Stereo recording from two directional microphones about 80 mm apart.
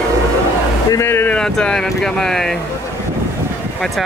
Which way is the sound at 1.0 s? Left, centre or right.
Left.